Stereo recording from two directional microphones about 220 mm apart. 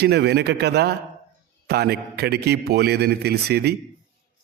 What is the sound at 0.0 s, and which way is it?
A man's voice, 50° right (ahead or behind).